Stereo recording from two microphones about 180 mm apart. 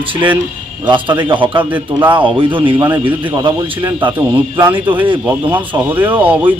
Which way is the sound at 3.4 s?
25° right (ahead or behind).